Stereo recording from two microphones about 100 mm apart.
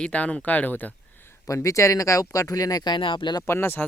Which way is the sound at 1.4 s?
35° left (ahead or behind).